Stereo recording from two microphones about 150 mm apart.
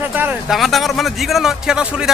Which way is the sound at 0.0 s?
10° right (ahead or behind).